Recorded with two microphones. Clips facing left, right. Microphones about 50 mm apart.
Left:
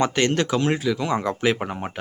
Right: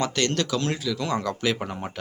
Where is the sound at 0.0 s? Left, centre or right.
Left.